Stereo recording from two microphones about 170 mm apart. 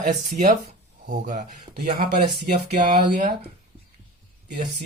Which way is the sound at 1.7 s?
65° right (ahead or behind).